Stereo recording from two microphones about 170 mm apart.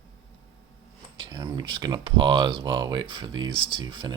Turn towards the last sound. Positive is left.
turn(degrees=-25)  # may be behind; listen again after turning